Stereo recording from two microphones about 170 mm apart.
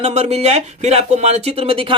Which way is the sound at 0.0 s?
40° right (ahead or behind).